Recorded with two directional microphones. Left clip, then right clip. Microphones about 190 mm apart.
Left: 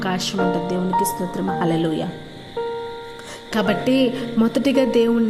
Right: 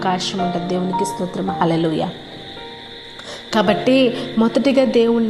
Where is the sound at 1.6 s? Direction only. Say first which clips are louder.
Right 4 dB; 15° left (ahead or behind).